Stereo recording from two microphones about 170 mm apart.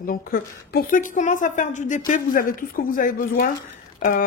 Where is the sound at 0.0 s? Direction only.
55° left (ahead or behind).